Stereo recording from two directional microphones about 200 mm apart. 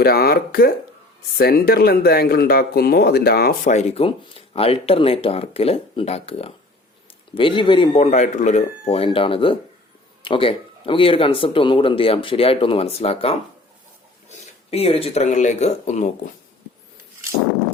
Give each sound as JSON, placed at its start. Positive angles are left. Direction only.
{"t": 0.0, "sound": "speech", "side_deg": 50}
{"t": 3.7, "sound": "speech", "side_deg": 35}
{"t": 14.7, "sound": "speech", "side_deg": 30}